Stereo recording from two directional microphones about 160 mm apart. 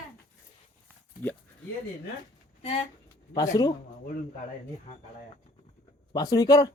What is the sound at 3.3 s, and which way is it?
Speech, 25° left (ahead or behind).